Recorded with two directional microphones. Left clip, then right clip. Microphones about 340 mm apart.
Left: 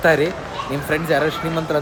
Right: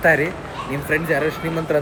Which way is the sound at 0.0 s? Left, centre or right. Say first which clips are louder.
Left 1 dB; centre.